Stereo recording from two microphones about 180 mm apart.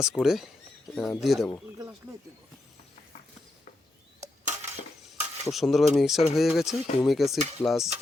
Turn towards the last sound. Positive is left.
turn(degrees=0)  # may be behind; listen again after turning